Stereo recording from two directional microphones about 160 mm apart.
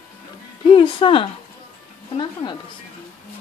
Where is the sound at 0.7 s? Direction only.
35° left (ahead or behind).